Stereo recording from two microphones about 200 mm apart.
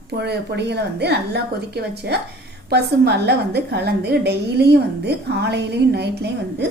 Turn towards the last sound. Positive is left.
turn(degrees=-55)  # may be behind; listen again after turning